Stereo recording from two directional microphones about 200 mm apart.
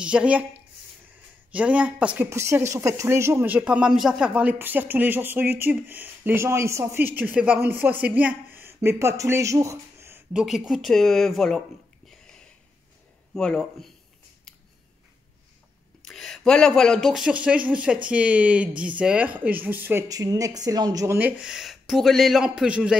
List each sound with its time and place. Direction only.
0.0 s speech: 5° right (ahead or behind)
1.5 s speech: 5° right (ahead or behind)
13.3 s speech: 5° left (ahead or behind)
16.0 s speech: centre (ahead or behind)